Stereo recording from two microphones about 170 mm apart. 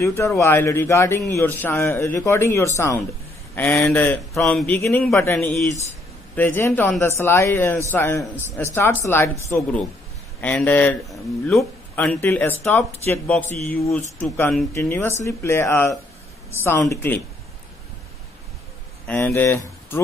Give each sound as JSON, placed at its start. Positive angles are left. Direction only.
{"t": 0.0, "sound": "a man's voice", "side_deg": 15}
{"t": 4.7, "sound": "a man's voice", "side_deg": 15}
{"t": 19.0, "sound": "a man's voice", "side_deg": 10}